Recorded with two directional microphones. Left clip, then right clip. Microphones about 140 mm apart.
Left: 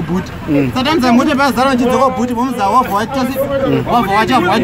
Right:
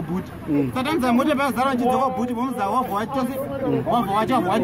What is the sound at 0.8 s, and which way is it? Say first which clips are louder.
Speech: left 8 dB; 35° right (ahead or behind).